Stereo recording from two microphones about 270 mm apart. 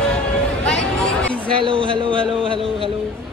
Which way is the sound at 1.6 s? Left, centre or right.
Centre.